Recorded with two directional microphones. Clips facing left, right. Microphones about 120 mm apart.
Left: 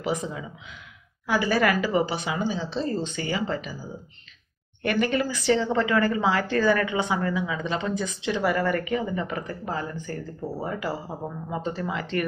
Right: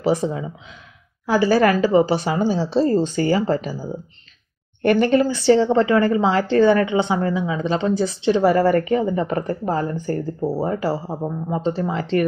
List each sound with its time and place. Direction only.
0.0 s a woman's voice: 35° right (ahead or behind)
4.8 s a woman's voice: 30° right (ahead or behind)